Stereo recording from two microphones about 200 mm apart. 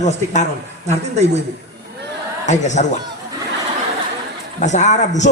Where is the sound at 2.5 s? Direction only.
35° left (ahead or behind).